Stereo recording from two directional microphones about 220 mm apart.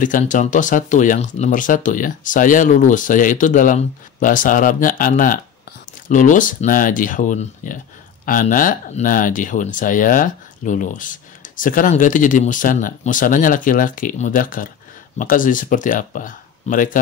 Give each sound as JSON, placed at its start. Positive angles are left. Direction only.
{"t": 0.0, "sound": "speech", "side_deg": 35}